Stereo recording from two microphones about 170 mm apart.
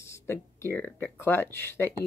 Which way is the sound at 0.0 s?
15° left (ahead or behind).